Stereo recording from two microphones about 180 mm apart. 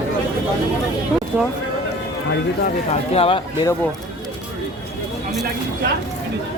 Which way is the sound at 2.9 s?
30° left (ahead or behind).